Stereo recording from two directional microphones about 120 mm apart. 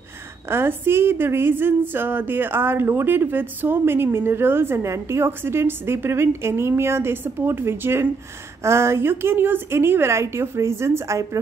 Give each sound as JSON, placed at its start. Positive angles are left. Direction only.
{"t": 0.5, "sound": "speech", "side_deg": -20}